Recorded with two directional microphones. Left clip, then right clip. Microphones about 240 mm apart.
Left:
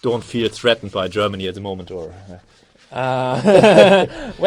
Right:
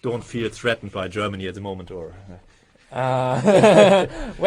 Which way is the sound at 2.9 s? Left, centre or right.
Centre.